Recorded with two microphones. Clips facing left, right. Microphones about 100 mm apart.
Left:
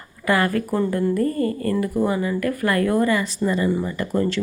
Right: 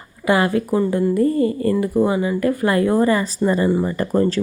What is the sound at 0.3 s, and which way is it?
Speech, 20° right (ahead or behind).